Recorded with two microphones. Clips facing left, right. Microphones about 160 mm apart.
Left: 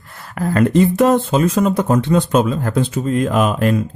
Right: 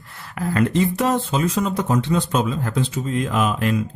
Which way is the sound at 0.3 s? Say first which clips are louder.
Left 5 dB; 45° left (ahead or behind).